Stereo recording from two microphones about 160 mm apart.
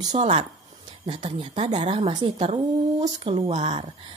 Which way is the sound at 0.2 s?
40° right (ahead or behind).